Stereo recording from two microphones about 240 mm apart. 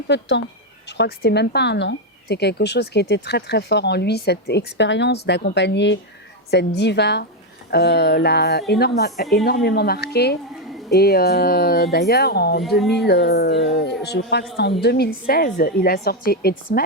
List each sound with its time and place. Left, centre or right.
0.1 s a woman's voice: left